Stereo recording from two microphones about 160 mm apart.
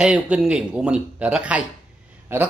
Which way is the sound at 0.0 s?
5° right (ahead or behind).